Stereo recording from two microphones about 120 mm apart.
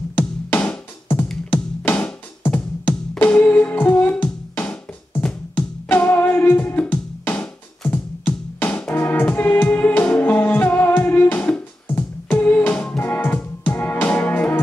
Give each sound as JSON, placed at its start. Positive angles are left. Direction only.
{"t": 0.1, "sound": "music", "side_deg": 15}